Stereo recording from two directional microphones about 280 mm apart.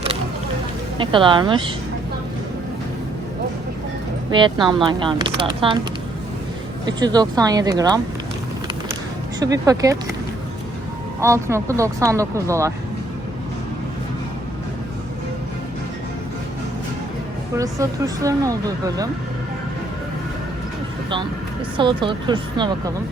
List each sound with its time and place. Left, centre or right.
0.9 s speech: centre
4.3 s speech: centre
6.8 s speech: centre
9.4 s speech: centre
11.2 s speech: centre
17.6 s speech: centre
21.8 s speech: centre